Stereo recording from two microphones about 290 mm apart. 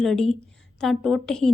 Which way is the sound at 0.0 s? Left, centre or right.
Centre.